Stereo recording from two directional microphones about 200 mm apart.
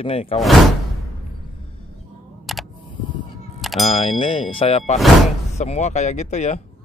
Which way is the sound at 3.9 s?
30° left (ahead or behind).